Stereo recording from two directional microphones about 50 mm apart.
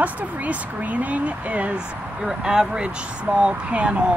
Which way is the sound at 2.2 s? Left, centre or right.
Centre.